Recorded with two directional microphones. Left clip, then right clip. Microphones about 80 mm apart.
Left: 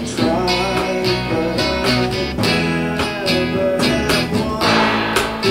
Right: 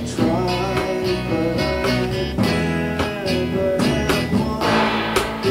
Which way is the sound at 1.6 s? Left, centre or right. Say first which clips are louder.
Left 3 dB; left.